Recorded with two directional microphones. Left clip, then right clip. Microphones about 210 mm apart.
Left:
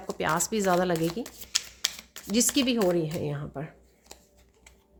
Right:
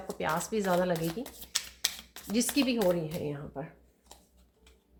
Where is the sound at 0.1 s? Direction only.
55° left (ahead or behind).